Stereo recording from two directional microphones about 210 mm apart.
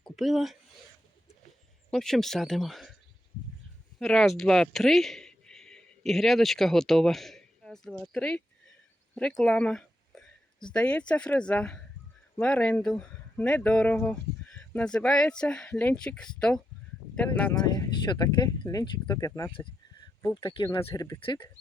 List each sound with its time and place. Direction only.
0.0 s speech: centre (ahead or behind)
1.9 s speech: centre (ahead or behind)
4.0 s speech: centre (ahead or behind)
9.1 s a sound: centre (ahead or behind)
11.1 s speech: 5° left (ahead or behind)
17.5 s speech: 20° left (ahead or behind)